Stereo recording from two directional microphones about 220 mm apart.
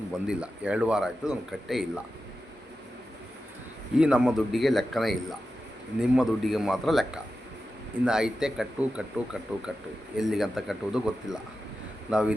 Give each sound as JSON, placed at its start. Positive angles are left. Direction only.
{"t": 0.1, "sound": "speech", "side_deg": -5}
{"t": 3.9, "sound": "speech", "side_deg": -5}